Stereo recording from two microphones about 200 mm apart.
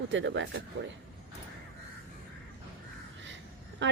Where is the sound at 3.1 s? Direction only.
65° right (ahead or behind).